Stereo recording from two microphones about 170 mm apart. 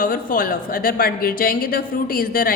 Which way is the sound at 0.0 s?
55° left (ahead or behind).